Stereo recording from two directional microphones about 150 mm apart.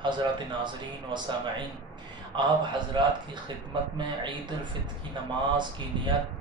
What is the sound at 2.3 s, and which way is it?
Speech, 30° right (ahead or behind).